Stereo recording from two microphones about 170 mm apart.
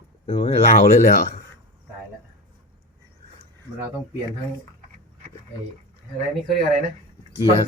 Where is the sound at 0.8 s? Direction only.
50° left (ahead or behind).